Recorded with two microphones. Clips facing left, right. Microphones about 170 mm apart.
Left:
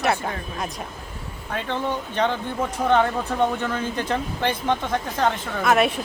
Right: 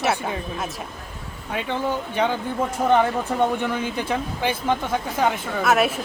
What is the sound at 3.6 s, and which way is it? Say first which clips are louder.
Speech: right 1 dB; 10° right (ahead or behind).